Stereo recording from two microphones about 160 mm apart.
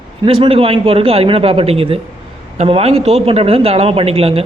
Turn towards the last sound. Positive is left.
turn(degrees=-35)  # may be behind; listen again after turning